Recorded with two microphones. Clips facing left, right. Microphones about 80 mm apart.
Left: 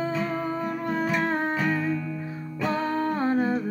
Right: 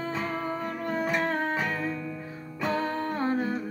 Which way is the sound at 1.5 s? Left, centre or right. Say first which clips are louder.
Left 4 dB; centre.